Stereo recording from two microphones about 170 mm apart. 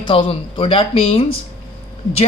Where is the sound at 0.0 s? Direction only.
30° left (ahead or behind).